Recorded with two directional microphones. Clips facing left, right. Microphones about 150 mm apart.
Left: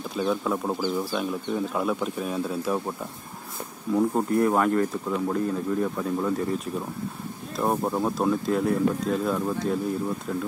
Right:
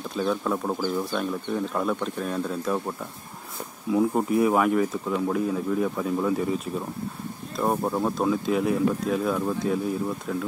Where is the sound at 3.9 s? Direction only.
5° right (ahead or behind).